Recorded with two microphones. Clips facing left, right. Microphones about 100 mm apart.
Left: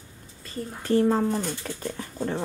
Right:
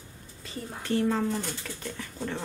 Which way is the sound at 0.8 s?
35° left (ahead or behind).